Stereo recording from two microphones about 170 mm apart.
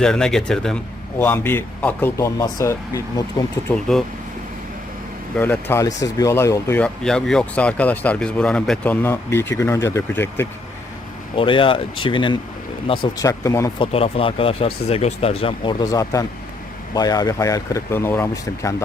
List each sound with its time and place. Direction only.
0.0 s speech: 5° left (ahead or behind); by 3.4 s 20° left (ahead or behind)
3.7 s speech: centre (ahead or behind)
5.4 s speech: 10° left (ahead or behind)
11.3 s speech: 30° left (ahead or behind)
13.7 s speech: 30° left (ahead or behind)
15.8 s speech: 20° left (ahead or behind)